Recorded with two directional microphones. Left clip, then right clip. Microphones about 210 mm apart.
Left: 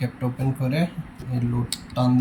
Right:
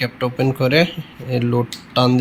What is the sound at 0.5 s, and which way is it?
Speech, 10° right (ahead or behind).